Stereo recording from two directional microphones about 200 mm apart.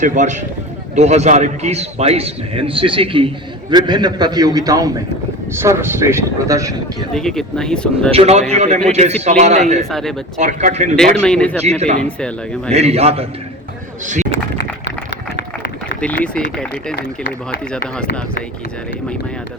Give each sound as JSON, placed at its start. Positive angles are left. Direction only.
{"t": 0.0, "sound": "a man's voice", "side_deg": -40}
{"t": 7.1, "sound": "speech", "side_deg": 0}
{"t": 8.1, "sound": "a man's voice", "side_deg": -30}
{"t": 9.9, "sound": "speech", "side_deg": 0}
{"t": 10.3, "sound": "a man's voice", "side_deg": -35}
{"t": 10.9, "sound": "speech", "side_deg": 5}
{"t": 11.6, "sound": "a man's voice", "side_deg": -35}
{"t": 11.9, "sound": "speech", "side_deg": 5}
{"t": 12.7, "sound": "a man's voice", "side_deg": -30}
{"t": 14.6, "sound": "run", "side_deg": 60}
{"t": 16.0, "sound": "speech", "side_deg": 5}